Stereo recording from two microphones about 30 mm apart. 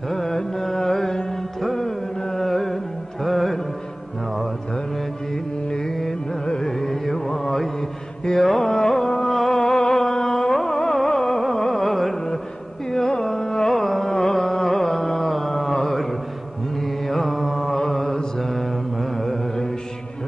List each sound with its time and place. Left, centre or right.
0.1 s carnatic music: centre
1.6 s music: centre
5.3 s music: left
6.4 s carnatic music: left
6.7 s music: centre
8.4 s carnatic music: centre
9.5 s music: left
13.3 s carnatic music: centre
16.7 s mantra: centre